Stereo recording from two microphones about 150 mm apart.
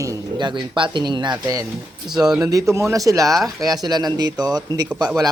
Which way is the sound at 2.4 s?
20° right (ahead or behind).